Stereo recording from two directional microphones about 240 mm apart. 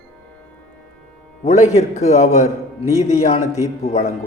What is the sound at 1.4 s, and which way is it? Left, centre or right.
A man's voice, left.